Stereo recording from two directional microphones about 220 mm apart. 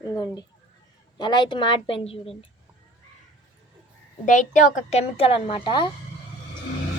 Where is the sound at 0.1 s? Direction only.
20° left (ahead or behind).